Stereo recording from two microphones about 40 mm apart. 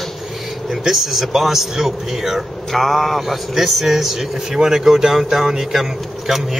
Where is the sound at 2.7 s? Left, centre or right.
Centre.